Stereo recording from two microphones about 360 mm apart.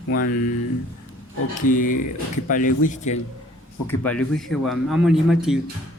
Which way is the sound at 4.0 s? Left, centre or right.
Centre.